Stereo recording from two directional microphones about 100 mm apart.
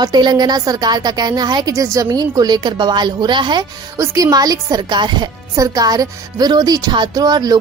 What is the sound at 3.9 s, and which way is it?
Speech, 35° right (ahead or behind).